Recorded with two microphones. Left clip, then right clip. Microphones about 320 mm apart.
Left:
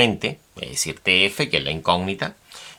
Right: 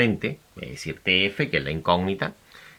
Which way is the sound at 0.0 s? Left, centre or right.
Centre.